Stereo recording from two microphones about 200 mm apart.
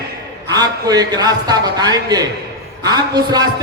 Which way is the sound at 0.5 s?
20° right (ahead or behind).